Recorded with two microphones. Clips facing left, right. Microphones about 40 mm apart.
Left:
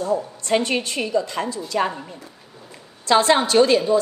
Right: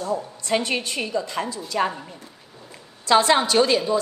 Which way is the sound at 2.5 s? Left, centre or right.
Centre.